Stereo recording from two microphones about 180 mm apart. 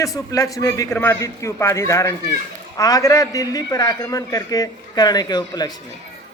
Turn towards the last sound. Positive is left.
turn(degrees=25)  # may be behind; listen again after turning